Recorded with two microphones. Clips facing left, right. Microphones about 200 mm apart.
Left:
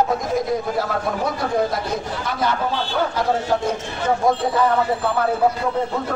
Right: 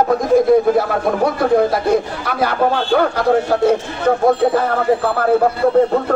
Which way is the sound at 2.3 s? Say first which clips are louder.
Right 6 dB; 65° right (ahead or behind).